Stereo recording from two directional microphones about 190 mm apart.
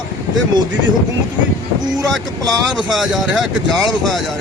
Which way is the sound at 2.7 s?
Centre (ahead or behind).